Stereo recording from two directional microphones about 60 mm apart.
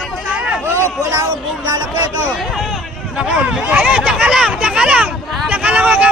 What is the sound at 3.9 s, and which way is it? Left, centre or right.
Speech, right.